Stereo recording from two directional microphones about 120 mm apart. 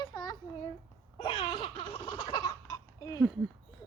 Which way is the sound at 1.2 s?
45° left (ahead or behind).